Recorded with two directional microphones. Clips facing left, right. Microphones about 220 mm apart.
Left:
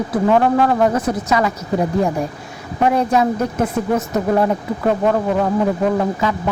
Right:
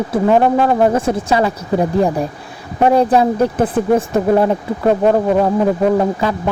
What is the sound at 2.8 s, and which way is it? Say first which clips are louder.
Speech: right 4 dB; 30° right (ahead or behind).